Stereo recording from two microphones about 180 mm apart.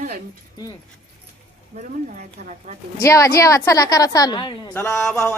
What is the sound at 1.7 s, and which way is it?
Speech, 40° right (ahead or behind).